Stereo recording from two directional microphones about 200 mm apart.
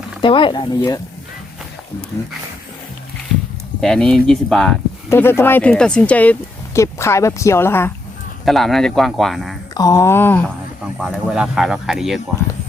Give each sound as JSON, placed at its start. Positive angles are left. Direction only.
{"t": 0.2, "sound": "speech", "side_deg": 25}
{"t": 3.8, "sound": "a woman's voice", "side_deg": 5}
{"t": 8.4, "sound": "speech", "side_deg": 0}
{"t": 9.7, "sound": "a woman's voice", "side_deg": 15}
{"t": 11.0, "sound": "speech", "side_deg": -5}